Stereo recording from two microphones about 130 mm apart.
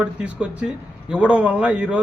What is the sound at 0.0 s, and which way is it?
A man's voice, 5° right (ahead or behind).